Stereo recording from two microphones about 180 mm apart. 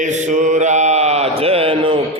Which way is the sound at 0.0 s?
45° right (ahead or behind).